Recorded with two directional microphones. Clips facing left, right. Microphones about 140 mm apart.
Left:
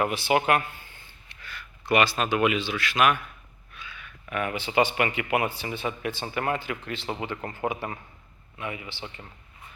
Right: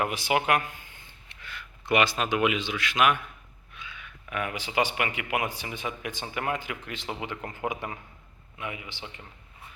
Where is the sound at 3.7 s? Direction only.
20° right (ahead or behind).